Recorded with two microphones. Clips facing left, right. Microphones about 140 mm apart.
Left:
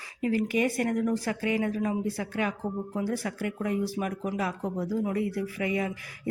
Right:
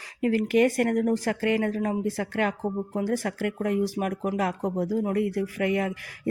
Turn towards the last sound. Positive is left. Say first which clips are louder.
# right 4 dB
turn(degrees=-55)  # may be behind; listen again after turning